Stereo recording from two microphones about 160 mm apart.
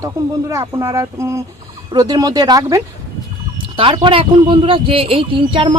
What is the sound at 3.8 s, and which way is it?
Speech, 30° right (ahead or behind).